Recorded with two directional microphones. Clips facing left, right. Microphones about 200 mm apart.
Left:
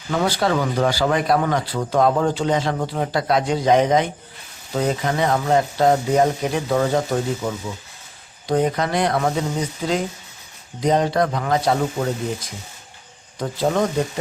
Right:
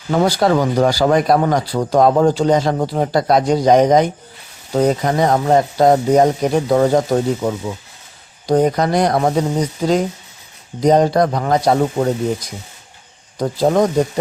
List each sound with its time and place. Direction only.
0.1 s speech: 40° right (ahead or behind)
13.4 s speech: 40° right (ahead or behind)